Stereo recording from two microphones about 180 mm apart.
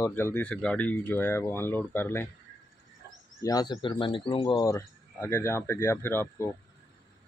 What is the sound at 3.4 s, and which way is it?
Speech, 20° left (ahead or behind).